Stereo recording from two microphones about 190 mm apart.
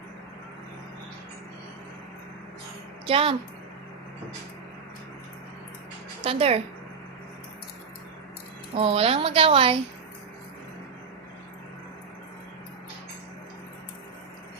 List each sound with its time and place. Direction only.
3.1 s a woman's voice: 30° right (ahead or behind)
6.2 s a woman's voice: 30° right (ahead or behind)
8.7 s a woman's voice: 30° right (ahead or behind)